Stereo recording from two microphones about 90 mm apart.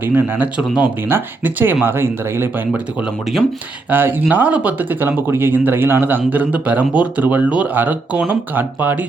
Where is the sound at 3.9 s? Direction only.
20° right (ahead or behind).